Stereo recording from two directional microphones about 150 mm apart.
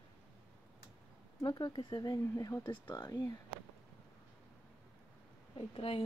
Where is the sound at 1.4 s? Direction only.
30° left (ahead or behind).